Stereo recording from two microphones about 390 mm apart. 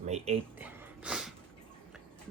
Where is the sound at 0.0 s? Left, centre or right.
Centre.